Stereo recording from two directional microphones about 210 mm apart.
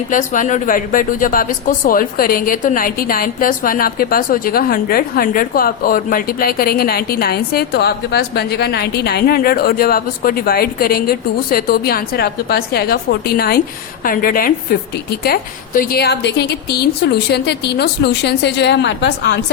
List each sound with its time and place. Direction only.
0.1 s speech: 40° left (ahead or behind); by 19.4 s 55° left (ahead or behind)